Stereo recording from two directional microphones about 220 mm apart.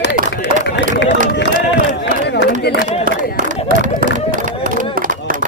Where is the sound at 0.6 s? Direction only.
55° left (ahead or behind).